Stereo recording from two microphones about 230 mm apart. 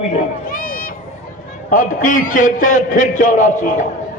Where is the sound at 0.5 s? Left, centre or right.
Left.